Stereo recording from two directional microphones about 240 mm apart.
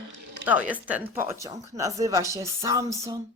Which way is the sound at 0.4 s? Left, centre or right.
Centre.